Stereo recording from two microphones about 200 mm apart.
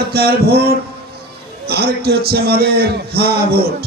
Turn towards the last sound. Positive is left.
turn(degrees=-50)  # may be behind; listen again after turning